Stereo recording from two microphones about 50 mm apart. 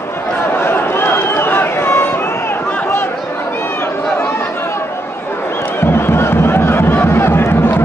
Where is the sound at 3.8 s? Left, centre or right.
Left.